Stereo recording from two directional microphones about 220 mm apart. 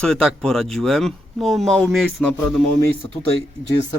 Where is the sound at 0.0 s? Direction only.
Centre (ahead or behind).